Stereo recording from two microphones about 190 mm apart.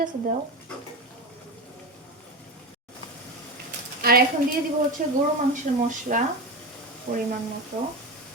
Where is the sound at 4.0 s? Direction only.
50° right (ahead or behind).